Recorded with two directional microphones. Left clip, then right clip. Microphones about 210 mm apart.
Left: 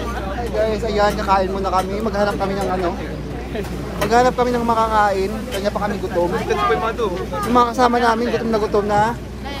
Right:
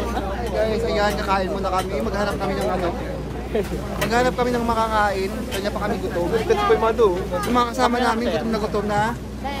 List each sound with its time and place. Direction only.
0.6 s speech: centre (ahead or behind)
4.1 s speech: centre (ahead or behind)
6.5 s speech: 45° right (ahead or behind)
7.5 s speech: 5° left (ahead or behind)